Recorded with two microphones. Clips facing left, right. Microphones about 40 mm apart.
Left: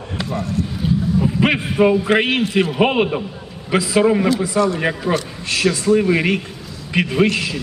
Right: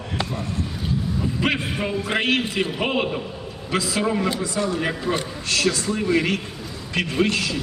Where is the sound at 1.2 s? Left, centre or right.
Left.